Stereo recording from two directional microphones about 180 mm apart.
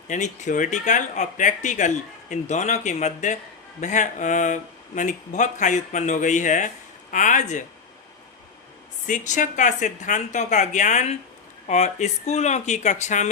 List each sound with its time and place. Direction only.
0.1 s speech: 45° left (ahead or behind)
9.0 s speech: 45° left (ahead or behind)